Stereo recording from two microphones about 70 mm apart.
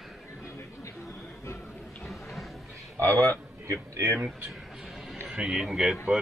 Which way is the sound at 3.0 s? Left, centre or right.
Right.